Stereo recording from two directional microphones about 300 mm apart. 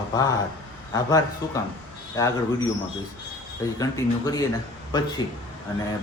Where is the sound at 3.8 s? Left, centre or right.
Centre.